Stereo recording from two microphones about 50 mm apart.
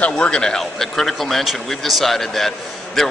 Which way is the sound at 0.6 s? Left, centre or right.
Centre.